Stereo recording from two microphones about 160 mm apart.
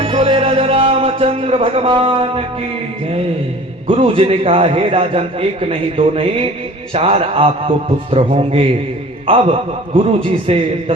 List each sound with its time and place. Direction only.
0.0 s speech: 35° right (ahead or behind)
3.8 s a man's voice: 35° right (ahead or behind)